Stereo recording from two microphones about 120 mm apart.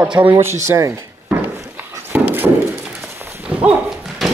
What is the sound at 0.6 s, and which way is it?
Speech, 20° right (ahead or behind).